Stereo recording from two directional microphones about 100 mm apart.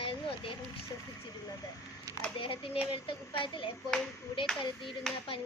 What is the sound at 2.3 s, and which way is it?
A child's voice, 60° left (ahead or behind).